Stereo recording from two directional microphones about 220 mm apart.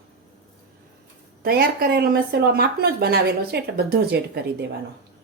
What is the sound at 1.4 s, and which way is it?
Speech, 45° right (ahead or behind).